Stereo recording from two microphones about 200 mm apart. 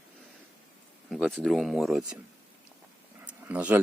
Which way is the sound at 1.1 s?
Centre (ahead or behind).